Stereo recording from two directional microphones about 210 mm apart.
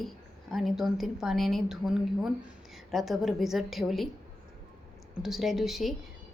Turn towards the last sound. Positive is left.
turn(degrees=0)  # may be behind; listen again after turning